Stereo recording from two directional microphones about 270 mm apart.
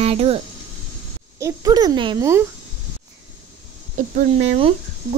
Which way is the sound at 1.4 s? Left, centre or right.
Centre.